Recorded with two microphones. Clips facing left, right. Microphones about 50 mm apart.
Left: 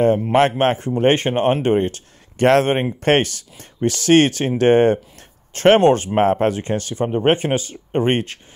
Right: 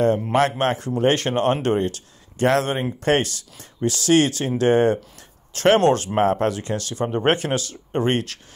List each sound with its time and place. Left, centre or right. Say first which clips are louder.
0.3 s speech: left 4 dB; left
1.9 s speech: left 1 dB; left
5.8 s speech: left 3 dB; left